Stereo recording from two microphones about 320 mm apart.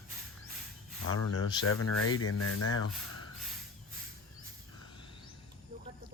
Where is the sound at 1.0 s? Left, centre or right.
Left.